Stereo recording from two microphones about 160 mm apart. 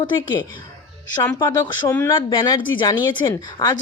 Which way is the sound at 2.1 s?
30° left (ahead or behind).